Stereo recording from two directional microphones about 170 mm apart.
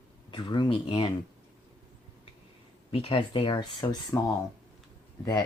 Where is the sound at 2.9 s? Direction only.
30° left (ahead or behind).